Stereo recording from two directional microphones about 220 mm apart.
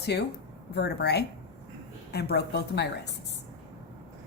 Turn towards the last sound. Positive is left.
turn(degrees=50)  # may be behind; listen again after turning